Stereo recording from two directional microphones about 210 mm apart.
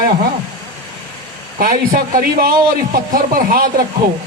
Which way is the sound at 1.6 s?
40° right (ahead or behind).